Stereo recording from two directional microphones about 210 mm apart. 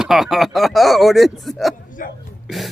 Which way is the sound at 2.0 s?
40° left (ahead or behind).